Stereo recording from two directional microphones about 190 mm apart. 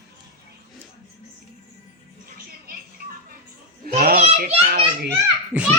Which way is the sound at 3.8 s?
50° right (ahead or behind).